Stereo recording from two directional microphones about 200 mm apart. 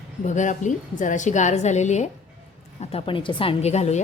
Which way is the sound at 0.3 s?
40° left (ahead or behind).